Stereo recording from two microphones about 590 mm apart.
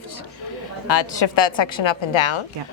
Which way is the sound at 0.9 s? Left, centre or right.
Left.